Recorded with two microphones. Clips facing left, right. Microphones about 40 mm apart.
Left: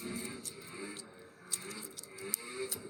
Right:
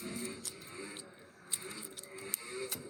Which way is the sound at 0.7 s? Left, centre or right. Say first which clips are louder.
Left 2 dB; centre.